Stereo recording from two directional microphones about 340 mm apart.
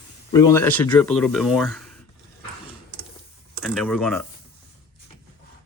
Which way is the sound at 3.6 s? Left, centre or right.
Centre.